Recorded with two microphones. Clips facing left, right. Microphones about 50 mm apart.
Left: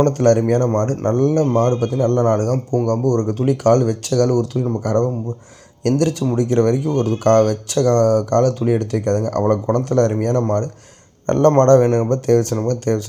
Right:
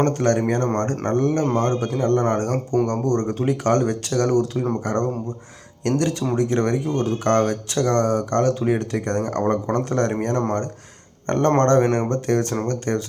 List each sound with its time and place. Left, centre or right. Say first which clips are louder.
0.2 s speech: left 5 dB; right